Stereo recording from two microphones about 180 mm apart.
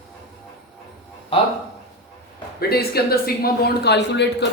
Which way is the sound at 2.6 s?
60° left (ahead or behind).